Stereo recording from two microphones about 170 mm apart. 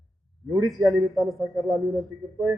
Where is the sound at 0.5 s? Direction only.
20° right (ahead or behind).